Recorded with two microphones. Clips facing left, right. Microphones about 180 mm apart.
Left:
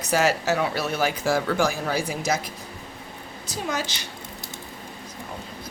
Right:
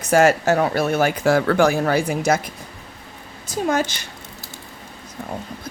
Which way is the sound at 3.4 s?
50° right (ahead or behind).